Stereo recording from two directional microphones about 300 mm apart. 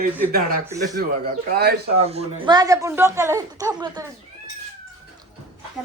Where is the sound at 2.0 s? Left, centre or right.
Centre.